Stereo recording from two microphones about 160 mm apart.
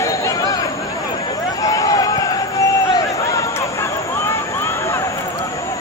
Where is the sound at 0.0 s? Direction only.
20° left (ahead or behind).